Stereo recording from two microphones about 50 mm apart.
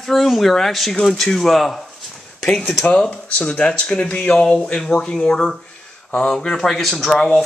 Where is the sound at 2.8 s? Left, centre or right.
Centre.